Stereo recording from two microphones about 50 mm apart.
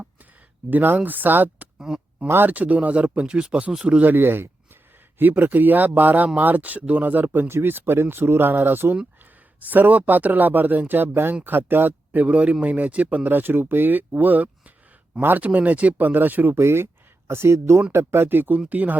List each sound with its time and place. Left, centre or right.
0.7 s speech: right
1.9 s speech: centre
2.2 s speech: right
2.5 s speech: right
4.0 s speech: right
16.6 s speech: right
17.9 s speech: right